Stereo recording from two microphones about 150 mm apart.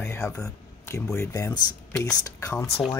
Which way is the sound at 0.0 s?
20° left (ahead or behind).